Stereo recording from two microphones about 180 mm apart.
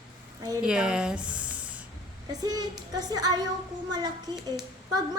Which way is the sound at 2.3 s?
20° right (ahead or behind).